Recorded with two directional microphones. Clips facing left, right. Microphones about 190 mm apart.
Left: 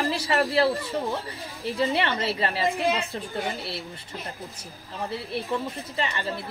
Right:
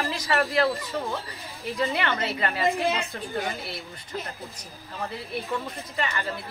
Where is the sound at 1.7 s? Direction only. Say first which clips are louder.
Left 1 dB; 30° left (ahead or behind).